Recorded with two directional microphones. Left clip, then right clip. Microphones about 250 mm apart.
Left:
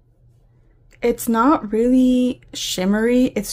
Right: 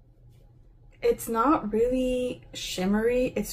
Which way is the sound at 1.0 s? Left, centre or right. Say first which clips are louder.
Left 6 dB; left.